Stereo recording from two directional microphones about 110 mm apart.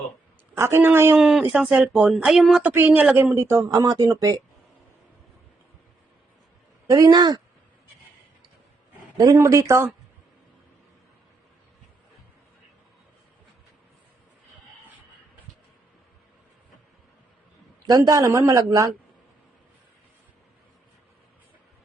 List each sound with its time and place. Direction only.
0.6 s speech: 20° right (ahead or behind)
1.1 s speech: 5° right (ahead or behind)
2.6 s speech: 15° right (ahead or behind)
3.3 s speech: 30° right (ahead or behind)
6.8 s speech: 35° right (ahead or behind)
9.1 s speech: 35° right (ahead or behind)
17.8 s speech: 35° right (ahead or behind)